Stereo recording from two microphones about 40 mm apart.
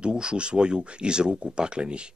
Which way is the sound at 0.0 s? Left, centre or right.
Right.